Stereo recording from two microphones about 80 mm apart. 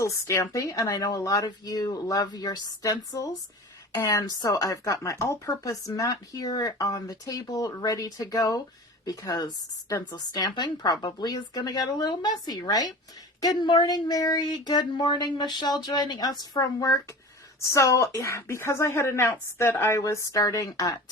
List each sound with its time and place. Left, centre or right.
0.0 s speech: left